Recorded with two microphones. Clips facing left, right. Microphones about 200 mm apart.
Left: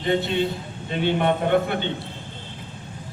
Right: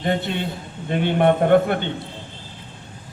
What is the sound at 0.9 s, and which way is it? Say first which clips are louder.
Speech: right 4 dB; 50° right (ahead or behind).